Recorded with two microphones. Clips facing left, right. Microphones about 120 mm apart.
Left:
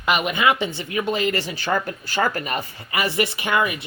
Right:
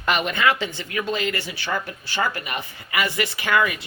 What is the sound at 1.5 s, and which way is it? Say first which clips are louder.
Speech: left 4 dB; 45° left (ahead or behind).